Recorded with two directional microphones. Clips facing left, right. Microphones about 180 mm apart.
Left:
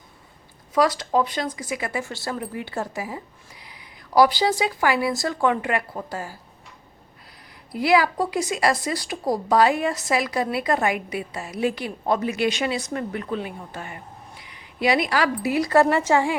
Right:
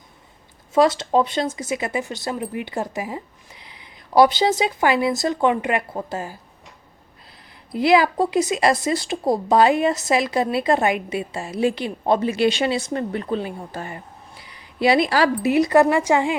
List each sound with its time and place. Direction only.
0.7 s speech: 25° right (ahead or behind)
7.7 s speech: 25° right (ahead or behind)